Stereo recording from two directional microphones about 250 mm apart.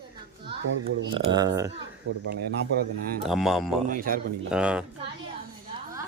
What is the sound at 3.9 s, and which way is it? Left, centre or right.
Speech, right.